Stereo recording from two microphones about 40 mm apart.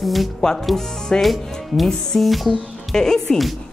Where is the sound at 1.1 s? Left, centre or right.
Left.